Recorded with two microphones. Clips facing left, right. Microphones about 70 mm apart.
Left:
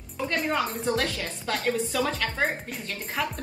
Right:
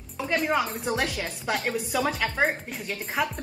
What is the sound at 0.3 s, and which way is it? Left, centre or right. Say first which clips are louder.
A woman's voice: right 2 dB; centre.